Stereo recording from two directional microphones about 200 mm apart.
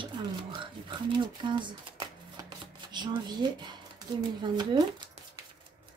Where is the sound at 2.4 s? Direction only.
20° right (ahead or behind).